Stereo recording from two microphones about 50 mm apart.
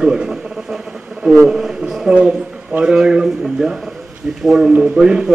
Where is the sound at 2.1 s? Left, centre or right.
Centre.